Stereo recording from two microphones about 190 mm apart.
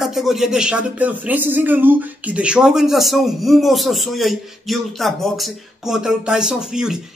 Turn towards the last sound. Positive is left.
turn(degrees=-5)  # may be behind; listen again after turning